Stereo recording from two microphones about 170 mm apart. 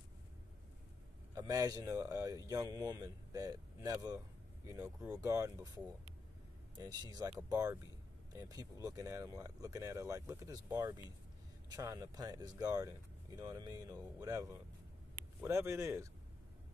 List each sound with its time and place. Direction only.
1.3 s speech: 20° right (ahead or behind)
4.7 s speech: 10° right (ahead or behind)
5.2 s speech: 20° right (ahead or behind)
6.8 s speech: 25° right (ahead or behind)